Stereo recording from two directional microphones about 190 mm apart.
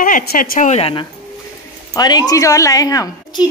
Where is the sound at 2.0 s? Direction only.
20° left (ahead or behind).